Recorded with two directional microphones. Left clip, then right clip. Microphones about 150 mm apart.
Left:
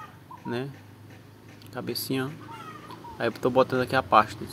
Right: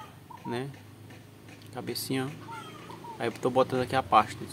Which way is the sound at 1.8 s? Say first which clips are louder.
Left 3 dB; 15° left (ahead or behind).